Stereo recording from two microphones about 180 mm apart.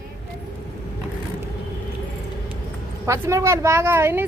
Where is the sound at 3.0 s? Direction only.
15° right (ahead or behind).